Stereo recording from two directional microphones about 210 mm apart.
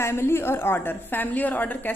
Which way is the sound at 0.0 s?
10° left (ahead or behind).